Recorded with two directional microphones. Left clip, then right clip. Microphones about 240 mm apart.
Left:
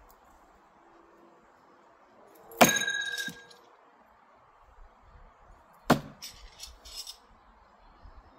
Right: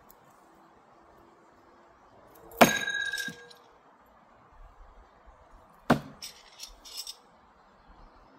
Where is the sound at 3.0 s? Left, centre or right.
Centre.